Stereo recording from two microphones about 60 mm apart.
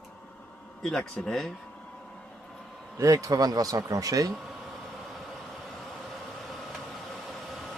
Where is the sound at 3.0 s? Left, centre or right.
Right.